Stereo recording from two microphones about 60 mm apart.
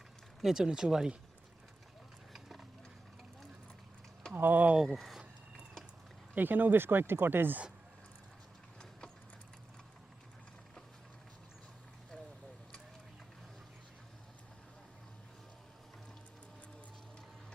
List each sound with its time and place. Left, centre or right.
0.4 s speech: centre
2.3 s horse: centre
4.4 s speech: right
4.9 s speech: centre
6.3 s speech: right